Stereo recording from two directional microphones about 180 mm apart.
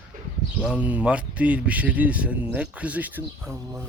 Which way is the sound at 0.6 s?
5° right (ahead or behind).